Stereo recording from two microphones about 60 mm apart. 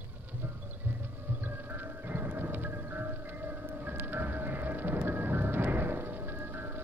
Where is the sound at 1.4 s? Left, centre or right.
Right.